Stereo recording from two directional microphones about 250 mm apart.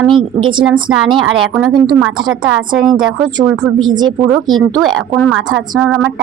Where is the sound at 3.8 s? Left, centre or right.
Centre.